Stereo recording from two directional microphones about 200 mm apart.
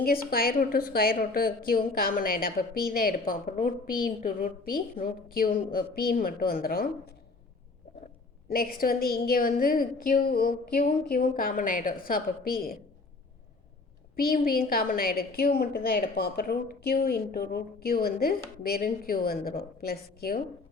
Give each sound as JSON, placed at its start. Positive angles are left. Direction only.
{"t": 0.0, "sound": "a woman's voice", "side_deg": 50}
{"t": 8.4, "sound": "a woman's voice", "side_deg": 45}
{"t": 14.2, "sound": "a woman's voice", "side_deg": 50}